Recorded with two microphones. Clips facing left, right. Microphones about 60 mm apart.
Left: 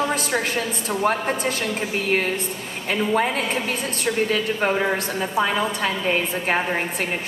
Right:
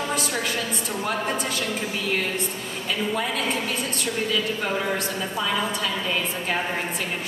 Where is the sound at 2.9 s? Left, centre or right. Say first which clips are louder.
Left 5 dB; left.